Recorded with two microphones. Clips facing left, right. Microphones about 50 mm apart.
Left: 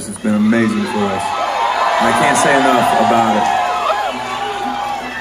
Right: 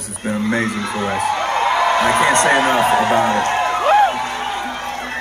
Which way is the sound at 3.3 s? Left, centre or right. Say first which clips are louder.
Left 3 dB; right.